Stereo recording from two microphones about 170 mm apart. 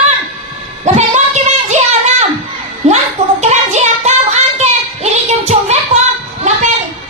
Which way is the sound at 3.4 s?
40° right (ahead or behind).